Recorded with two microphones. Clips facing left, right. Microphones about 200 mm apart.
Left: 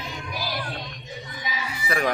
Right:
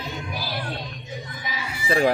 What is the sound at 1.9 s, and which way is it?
Speech, 30° right (ahead or behind).